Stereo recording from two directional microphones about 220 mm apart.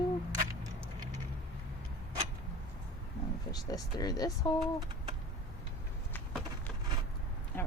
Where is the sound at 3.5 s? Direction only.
15° left (ahead or behind).